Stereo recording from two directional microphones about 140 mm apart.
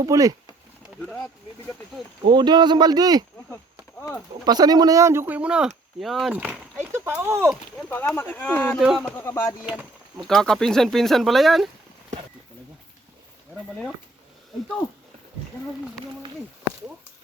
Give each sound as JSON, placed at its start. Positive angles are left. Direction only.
{"t": 0.0, "sound": "speech", "side_deg": -25}
{"t": 1.0, "sound": "speech", "side_deg": 5}
{"t": 2.2, "sound": "speech", "side_deg": -30}
{"t": 4.4, "sound": "speech", "side_deg": -30}
{"t": 6.3, "sound": "speech", "side_deg": -10}
{"t": 7.9, "sound": "speech", "side_deg": 10}
{"t": 8.8, "sound": "speech", "side_deg": 0}
{"t": 9.1, "sound": "speech", "side_deg": 20}
{"t": 10.2, "sound": "speech", "side_deg": 0}